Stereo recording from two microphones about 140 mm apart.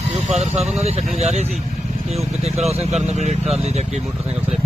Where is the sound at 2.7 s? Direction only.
50° right (ahead or behind).